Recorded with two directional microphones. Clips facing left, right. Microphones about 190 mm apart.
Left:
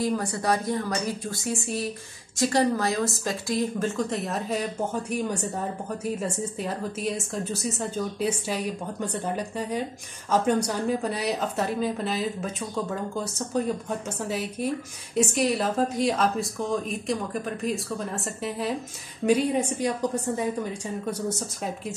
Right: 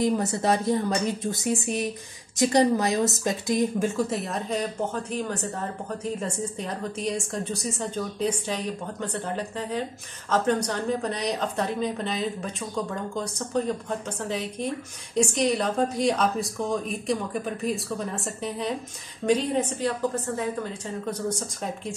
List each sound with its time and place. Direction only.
0.0 s a woman's voice: 20° right (ahead or behind); by 21.5 s 10° left (ahead or behind)